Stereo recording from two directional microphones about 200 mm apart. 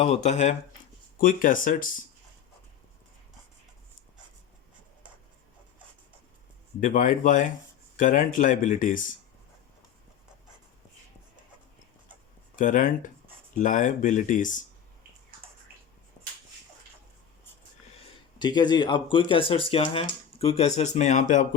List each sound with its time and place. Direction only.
0.0 s speech: 35° left (ahead or behind)
6.7 s speech: 40° left (ahead or behind)
12.5 s speech: 40° left (ahead or behind)
18.0 s speech: 20° left (ahead or behind); by 21.4 s 40° left (ahead or behind)